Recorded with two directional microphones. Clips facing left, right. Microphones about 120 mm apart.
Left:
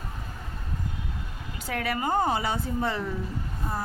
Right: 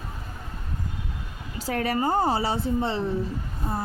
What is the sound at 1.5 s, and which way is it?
Speech, 40° right (ahead or behind).